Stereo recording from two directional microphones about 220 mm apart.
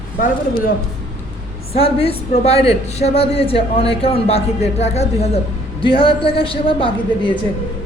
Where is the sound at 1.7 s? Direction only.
25° left (ahead or behind).